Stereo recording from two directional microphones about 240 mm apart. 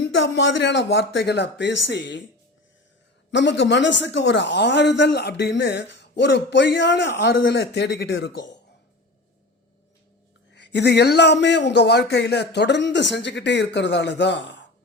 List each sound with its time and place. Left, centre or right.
0.0 s speech: left
3.3 s speech: left
10.5 s speech: left